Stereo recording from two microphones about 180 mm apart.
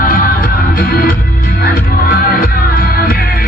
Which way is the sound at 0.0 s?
50° left (ahead or behind).